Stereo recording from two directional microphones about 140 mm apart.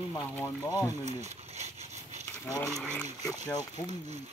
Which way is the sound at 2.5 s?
25° left (ahead or behind).